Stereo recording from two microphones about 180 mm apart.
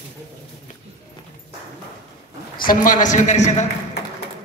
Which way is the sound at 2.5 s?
50° left (ahead or behind).